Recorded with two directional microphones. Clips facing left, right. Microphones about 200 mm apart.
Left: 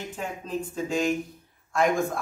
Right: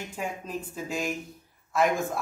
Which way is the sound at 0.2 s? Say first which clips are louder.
Left 2 dB; 10° right (ahead or behind).